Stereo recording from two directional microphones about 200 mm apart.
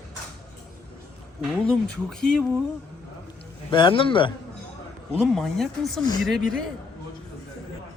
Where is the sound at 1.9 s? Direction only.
5° left (ahead or behind).